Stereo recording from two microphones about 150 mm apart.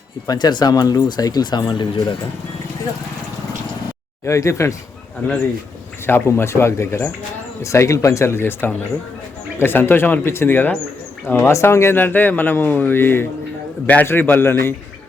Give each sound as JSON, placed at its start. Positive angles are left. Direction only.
{"t": 0.3, "sound": "speech", "side_deg": 30}
{"t": 4.3, "sound": "speech", "side_deg": 20}
{"t": 6.1, "sound": "speech", "side_deg": 15}